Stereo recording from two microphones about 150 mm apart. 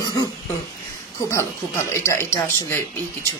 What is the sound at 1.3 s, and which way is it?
Speech, 20° left (ahead or behind).